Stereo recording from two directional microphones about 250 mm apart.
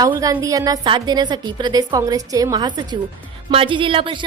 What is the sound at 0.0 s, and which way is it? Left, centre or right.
A woman's voice, centre.